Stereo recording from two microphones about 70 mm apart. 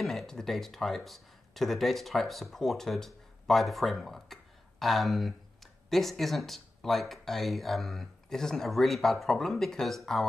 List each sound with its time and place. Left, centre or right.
0.0 s speech: centre